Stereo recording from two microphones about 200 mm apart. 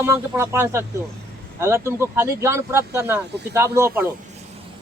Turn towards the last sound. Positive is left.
turn(degrees=-15)  # may be behind; listen again after turning